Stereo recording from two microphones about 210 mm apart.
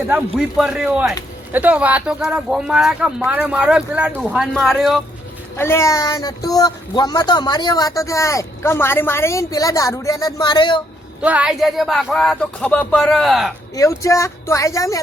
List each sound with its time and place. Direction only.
0.3 s speech: centre (ahead or behind)
5.5 s speech: 10° left (ahead or behind)
11.2 s speech: 5° right (ahead or behind)
13.7 s speech: 15° left (ahead or behind)